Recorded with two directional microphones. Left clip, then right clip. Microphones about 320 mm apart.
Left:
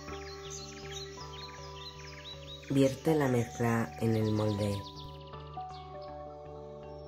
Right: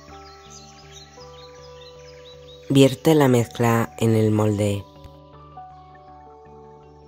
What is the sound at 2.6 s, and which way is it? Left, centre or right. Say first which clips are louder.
Speech: right 12 dB; right.